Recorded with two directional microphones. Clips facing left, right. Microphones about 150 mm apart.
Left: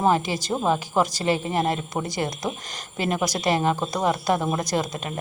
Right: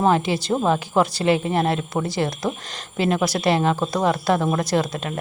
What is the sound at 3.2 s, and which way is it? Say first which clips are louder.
Speech: right 1 dB; 15° left (ahead or behind).